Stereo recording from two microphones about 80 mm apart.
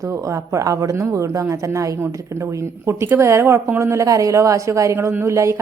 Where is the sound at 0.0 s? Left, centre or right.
Right.